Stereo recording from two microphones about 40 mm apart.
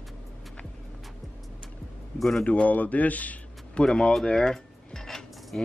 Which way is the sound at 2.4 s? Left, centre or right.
Left.